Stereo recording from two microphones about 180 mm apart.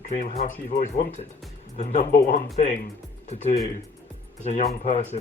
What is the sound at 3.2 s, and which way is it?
Speech, 40° left (ahead or behind).